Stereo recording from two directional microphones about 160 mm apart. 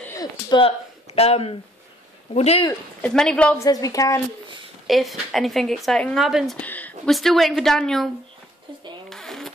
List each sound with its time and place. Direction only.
0.1 s a sound: 25° left (ahead or behind)
2.3 s speech: 40° left (ahead or behind)
3.0 s a woman's voice: 5° left (ahead or behind)
3.5 s a woman's voice: 20° left (ahead or behind)
4.8 s speech: centre (ahead or behind)
9.1 s a sound: 5° left (ahead or behind)